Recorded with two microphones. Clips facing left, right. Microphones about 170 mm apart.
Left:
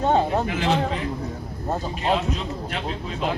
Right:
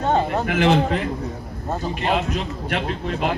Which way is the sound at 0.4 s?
70° right (ahead or behind).